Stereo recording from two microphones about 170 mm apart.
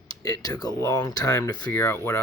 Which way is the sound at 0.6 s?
20° left (ahead or behind).